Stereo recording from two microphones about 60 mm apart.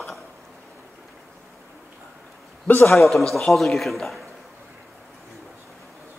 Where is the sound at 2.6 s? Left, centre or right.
Left.